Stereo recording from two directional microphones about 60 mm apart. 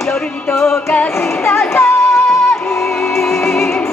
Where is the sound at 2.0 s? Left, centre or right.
Centre.